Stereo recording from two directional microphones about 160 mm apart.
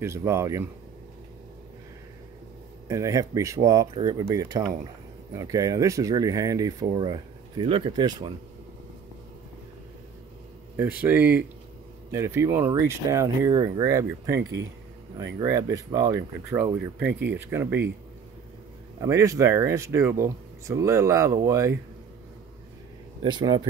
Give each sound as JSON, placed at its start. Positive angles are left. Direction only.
{"t": 0.0, "sound": "speech", "side_deg": -15}
{"t": 2.9, "sound": "speech", "side_deg": -20}
{"t": 10.8, "sound": "speech", "side_deg": -10}
{"t": 18.9, "sound": "speech", "side_deg": -20}
{"t": 23.2, "sound": "speech", "side_deg": -30}